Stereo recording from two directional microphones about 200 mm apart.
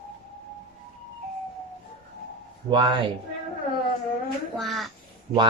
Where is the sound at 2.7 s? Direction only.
25° right (ahead or behind).